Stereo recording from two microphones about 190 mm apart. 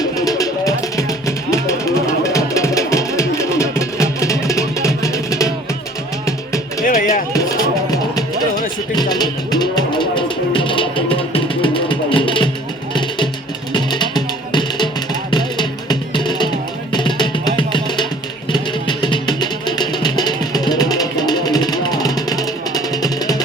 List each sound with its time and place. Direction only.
0.0 s music: 20° left (ahead or behind)
6.8 s music: 45° left (ahead or behind)
9.0 s music: 20° left (ahead or behind)